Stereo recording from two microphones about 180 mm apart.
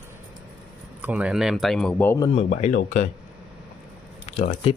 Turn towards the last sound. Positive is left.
turn(degrees=40)  # may be behind; listen again after turning